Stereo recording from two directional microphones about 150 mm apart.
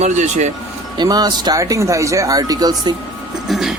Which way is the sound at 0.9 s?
25° right (ahead or behind).